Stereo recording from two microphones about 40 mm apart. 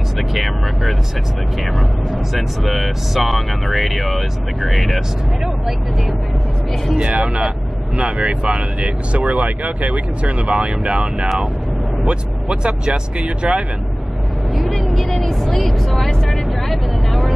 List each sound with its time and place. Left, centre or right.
0.2 s speech: centre
7.0 s speech: right
11.1 s speech: centre
12.6 s speech: right
14.5 s vehicle: centre